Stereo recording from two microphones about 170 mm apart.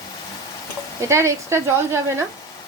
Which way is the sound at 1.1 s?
15° right (ahead or behind).